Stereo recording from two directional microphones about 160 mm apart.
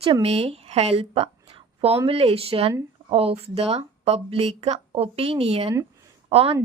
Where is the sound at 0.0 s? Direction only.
35° right (ahead or behind).